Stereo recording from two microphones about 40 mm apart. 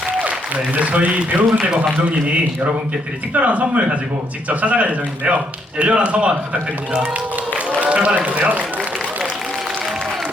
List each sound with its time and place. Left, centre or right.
0.2 s speech: right
3.3 s a man's voice: right